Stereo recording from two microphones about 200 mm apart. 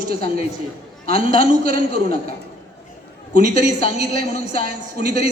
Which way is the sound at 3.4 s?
40° right (ahead or behind).